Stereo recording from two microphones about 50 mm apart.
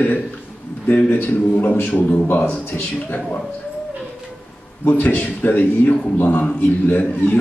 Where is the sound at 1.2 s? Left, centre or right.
Left.